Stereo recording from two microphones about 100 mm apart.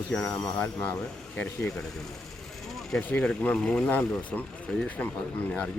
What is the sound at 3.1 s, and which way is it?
Speech, 15° left (ahead or behind).